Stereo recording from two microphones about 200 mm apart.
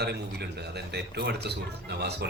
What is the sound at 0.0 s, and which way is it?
A woman's voice, 55° right (ahead or behind).